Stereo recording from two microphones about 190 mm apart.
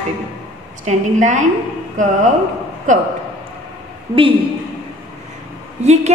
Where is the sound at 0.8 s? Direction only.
40° right (ahead or behind).